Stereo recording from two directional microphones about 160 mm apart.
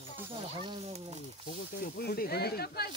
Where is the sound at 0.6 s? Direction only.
35° right (ahead or behind).